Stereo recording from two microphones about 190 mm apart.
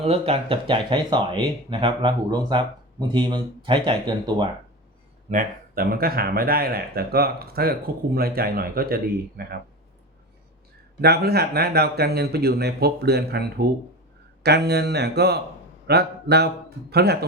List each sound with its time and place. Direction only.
0.0 s speech: 30° right (ahead or behind)
5.3 s speech: 45° right (ahead or behind)
11.0 s speech: 55° right (ahead or behind)